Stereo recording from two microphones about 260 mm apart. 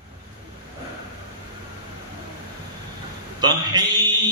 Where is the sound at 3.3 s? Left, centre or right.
Centre.